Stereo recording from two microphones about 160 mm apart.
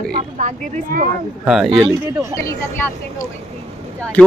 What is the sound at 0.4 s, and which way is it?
Speech, 50° right (ahead or behind).